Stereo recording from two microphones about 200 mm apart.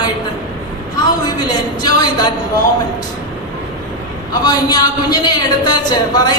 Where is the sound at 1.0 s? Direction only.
20° left (ahead or behind).